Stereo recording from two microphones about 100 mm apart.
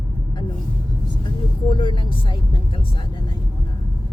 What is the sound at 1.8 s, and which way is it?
Vehicle, 55° left (ahead or behind).